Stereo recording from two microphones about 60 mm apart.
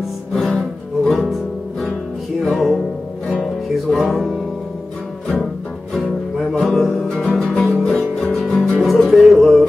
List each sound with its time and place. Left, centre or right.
0.6 s music: centre
2.5 s music: centre
3.9 s music: centre
6.6 s music: centre
7.7 s music: centre
8.3 s music: centre